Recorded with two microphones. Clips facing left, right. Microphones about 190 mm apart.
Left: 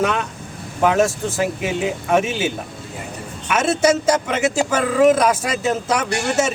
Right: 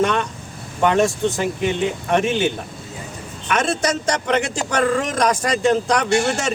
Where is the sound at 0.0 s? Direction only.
5° left (ahead or behind).